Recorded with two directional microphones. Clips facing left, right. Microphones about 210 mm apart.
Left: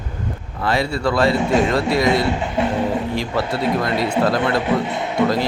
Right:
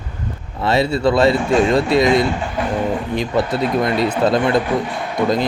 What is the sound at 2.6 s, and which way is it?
Music, 25° left (ahead or behind).